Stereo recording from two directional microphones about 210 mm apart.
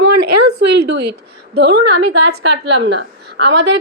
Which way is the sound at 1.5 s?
50° right (ahead or behind).